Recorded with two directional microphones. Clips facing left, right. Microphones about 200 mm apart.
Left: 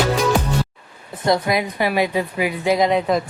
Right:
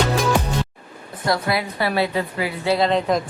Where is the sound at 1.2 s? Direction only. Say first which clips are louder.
Left 3 dB; 20° left (ahead or behind).